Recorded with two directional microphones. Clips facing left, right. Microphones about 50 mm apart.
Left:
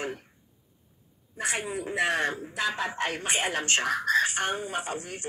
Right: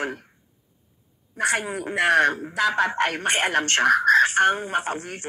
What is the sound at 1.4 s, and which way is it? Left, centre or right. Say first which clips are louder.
A man's voice: right 7 dB; right.